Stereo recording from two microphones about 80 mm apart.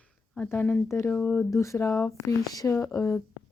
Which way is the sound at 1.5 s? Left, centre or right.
Left.